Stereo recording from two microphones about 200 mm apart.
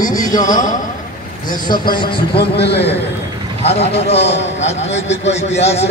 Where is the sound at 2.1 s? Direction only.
55° left (ahead or behind).